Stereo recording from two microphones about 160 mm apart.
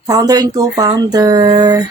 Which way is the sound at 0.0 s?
25° right (ahead or behind).